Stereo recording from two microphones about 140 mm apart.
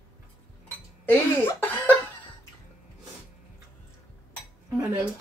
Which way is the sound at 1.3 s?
15° left (ahead or behind).